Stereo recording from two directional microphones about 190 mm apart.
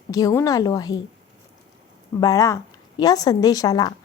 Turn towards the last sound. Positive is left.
turn(degrees=20)  # may be behind; listen again after turning